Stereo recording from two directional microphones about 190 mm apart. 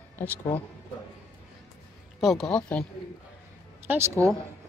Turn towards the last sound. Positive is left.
turn(degrees=-10)  # may be behind; listen again after turning